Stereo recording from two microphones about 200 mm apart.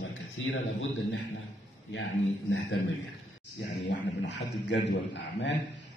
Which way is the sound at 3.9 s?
60° left (ahead or behind).